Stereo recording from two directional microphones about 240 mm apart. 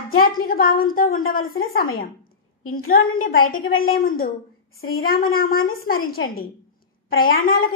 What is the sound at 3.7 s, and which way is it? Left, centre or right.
Speech, left.